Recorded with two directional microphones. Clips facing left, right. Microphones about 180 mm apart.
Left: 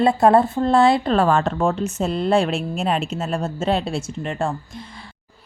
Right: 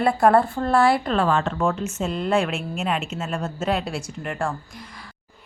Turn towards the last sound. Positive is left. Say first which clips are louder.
# left 3 dB
turn(degrees=25)  # may be behind; listen again after turning